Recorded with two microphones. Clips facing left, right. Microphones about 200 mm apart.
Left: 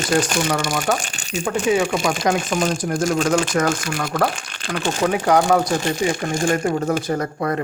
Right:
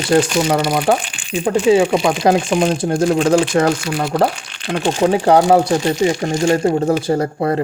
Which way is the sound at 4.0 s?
30° right (ahead or behind).